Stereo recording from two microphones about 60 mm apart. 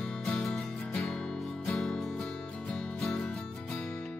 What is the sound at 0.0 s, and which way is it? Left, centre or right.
Music, centre.